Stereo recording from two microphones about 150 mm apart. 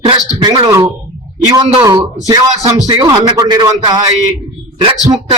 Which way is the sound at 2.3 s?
20° right (ahead or behind).